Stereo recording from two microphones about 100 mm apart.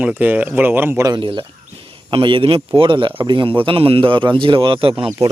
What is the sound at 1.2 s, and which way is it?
Speech, 55° right (ahead or behind).